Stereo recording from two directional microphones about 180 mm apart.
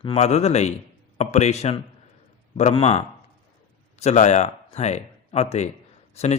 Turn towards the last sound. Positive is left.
turn(degrees=40)  # may be behind; listen again after turning